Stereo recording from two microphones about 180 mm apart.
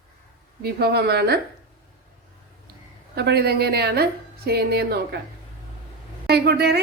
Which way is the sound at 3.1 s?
65° right (ahead or behind).